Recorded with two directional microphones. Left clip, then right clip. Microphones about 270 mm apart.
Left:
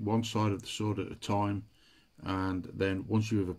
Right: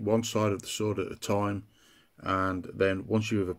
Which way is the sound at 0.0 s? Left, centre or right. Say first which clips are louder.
Right 5 dB; centre.